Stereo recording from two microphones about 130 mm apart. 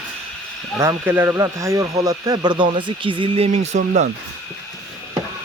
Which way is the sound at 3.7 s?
70° right (ahead or behind).